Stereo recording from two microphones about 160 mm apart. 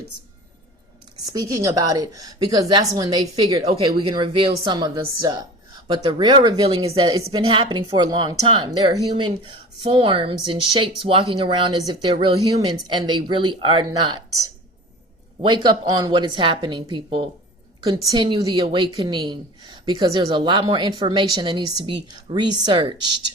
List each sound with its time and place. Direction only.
1.3 s a woman's voice: 20° right (ahead or behind)
3.6 s a woman's voice: 35° right (ahead or behind)
15.4 s a woman's voice: 30° right (ahead or behind)